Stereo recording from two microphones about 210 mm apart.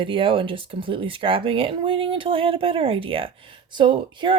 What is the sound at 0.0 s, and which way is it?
Speech, 25° right (ahead or behind).